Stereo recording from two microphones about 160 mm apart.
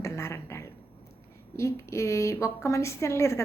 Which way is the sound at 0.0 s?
15° left (ahead or behind).